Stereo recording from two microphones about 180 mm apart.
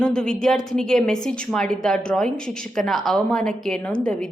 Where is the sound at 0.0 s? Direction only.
5° left (ahead or behind).